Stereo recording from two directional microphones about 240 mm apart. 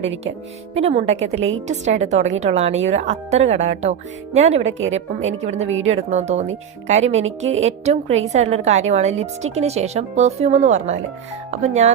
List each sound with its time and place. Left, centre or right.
0.7 s a woman's voice: right